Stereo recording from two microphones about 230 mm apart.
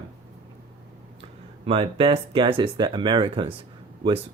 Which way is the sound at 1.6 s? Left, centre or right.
Right.